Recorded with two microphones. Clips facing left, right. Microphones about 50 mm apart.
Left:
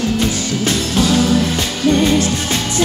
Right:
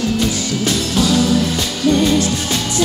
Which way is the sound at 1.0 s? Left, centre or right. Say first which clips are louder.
Left 1 dB; left.